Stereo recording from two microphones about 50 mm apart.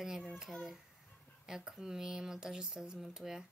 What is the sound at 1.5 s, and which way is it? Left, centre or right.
A woman's voice, centre.